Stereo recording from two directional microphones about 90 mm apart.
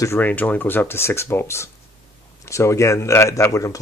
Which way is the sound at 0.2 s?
15° left (ahead or behind).